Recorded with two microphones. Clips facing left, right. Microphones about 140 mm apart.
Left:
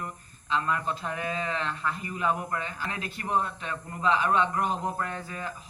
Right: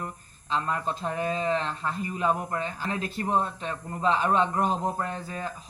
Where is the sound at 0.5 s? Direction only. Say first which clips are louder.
Even; 35° right (ahead or behind).